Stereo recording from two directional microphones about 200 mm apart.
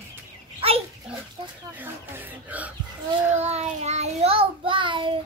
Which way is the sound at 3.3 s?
35° right (ahead or behind).